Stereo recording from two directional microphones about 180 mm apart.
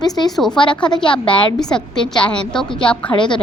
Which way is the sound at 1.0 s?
25° left (ahead or behind).